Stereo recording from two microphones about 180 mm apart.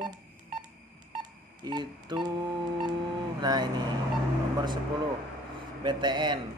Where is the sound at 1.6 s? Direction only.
25° right (ahead or behind).